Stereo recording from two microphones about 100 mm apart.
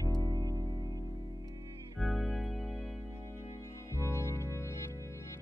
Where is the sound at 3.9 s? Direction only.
30° left (ahead or behind).